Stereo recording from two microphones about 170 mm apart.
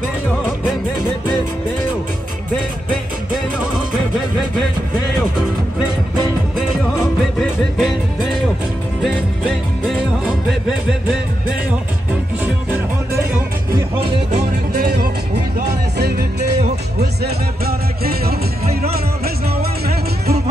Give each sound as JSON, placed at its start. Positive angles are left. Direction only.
{"t": 7.3, "sound": "music", "side_deg": 0}
{"t": 14.8, "sound": "music", "side_deg": -60}